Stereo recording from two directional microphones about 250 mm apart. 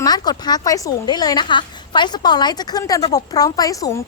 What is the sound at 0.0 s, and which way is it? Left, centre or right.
A woman's voice, centre.